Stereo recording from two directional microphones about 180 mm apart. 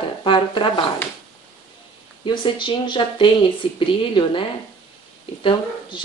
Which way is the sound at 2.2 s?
25° left (ahead or behind).